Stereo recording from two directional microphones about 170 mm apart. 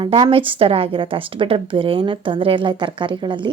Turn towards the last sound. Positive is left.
turn(degrees=-25)  # may be behind; listen again after turning